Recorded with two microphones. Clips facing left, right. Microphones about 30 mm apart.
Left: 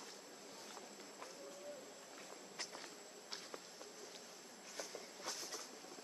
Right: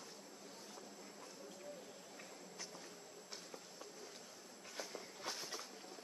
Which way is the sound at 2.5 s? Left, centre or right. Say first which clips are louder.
Left 4 dB; left.